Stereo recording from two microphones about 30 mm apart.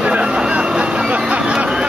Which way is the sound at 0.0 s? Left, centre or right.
Right.